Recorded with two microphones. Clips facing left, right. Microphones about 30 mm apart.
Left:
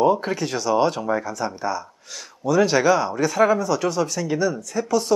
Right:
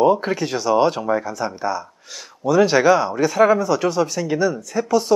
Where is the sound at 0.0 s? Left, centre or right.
Centre.